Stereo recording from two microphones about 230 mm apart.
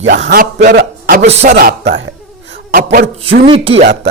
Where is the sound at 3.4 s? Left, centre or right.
Right.